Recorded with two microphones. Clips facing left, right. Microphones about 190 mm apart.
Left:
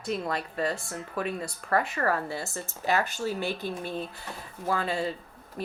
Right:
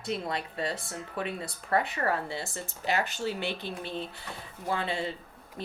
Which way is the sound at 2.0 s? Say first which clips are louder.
Left 2 dB; 25° right (ahead or behind).